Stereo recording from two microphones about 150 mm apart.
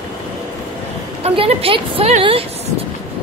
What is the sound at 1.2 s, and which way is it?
A woman's voice, 40° right (ahead or behind).